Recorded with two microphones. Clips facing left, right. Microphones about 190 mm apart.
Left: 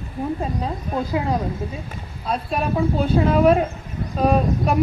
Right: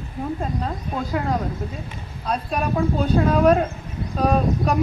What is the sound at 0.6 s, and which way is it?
Speech, 10° left (ahead or behind).